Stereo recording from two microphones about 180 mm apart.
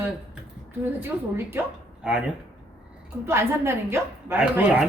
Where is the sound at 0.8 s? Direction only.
10° right (ahead or behind).